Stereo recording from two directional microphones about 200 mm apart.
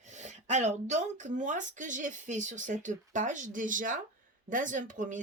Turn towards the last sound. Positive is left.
turn(degrees=-40)  # may be behind; listen again after turning